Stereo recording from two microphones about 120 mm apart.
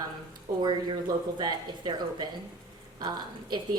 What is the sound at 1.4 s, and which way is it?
A woman's voice, 40° right (ahead or behind).